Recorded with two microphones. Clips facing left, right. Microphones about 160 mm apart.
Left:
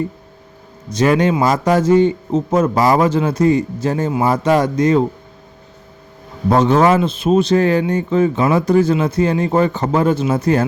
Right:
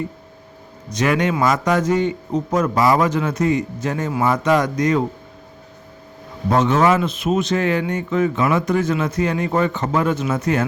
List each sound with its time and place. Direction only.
0.9 s a man's voice: 30° left (ahead or behind)
6.5 s a man's voice: 35° left (ahead or behind)